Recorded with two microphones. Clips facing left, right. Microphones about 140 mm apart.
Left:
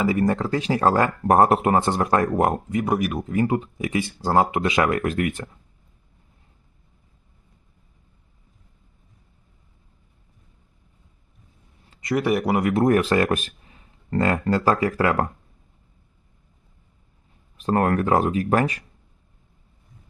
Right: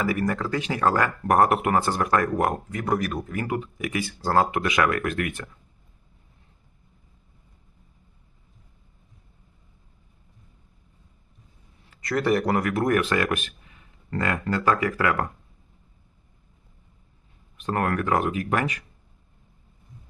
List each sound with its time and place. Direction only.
0.0 s speech: 25° left (ahead or behind)
11.9 s speech: 20° left (ahead or behind)
12.6 s speech: 25° left (ahead or behind)
17.6 s speech: 35° left (ahead or behind)